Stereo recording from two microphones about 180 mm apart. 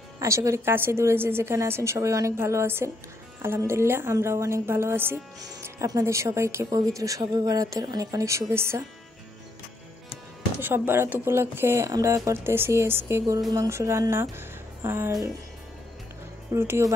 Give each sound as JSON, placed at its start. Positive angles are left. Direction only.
{"t": 0.2, "sound": "a woman's voice", "side_deg": -15}
{"t": 10.6, "sound": "a woman's voice", "side_deg": -10}
{"t": 16.5, "sound": "a woman's voice", "side_deg": -15}